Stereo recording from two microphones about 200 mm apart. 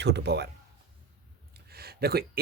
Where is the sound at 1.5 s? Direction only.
50° right (ahead or behind).